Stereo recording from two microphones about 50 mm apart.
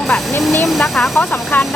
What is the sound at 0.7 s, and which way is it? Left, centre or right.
Speech, centre.